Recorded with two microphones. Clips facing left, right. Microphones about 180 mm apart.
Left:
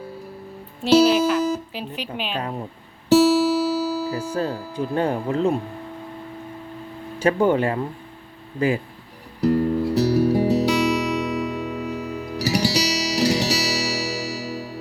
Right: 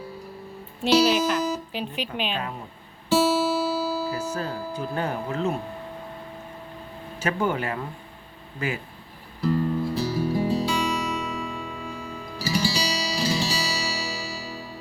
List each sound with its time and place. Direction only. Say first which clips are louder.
1.7 s speech: even; centre (ahead or behind)
2.3 s speech: left 3 dB; 35° left (ahead or behind)
3.1 s music: left 6 dB; 75° left (ahead or behind)
4.1 s speech: left 4 dB; 30° left (ahead or behind)
7.2 s speech: left 7 dB; 30° left (ahead or behind)
9.4 s music: left 5 dB; 75° left (ahead or behind)